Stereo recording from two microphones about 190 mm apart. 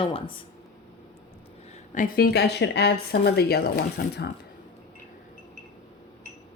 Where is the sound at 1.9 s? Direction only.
45° left (ahead or behind).